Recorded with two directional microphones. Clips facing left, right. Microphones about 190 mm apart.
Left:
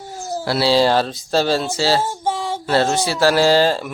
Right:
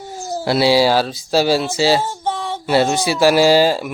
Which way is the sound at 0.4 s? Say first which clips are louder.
Right 2 dB; 15° right (ahead or behind).